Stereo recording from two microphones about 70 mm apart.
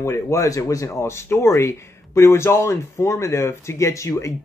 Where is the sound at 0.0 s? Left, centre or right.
Left.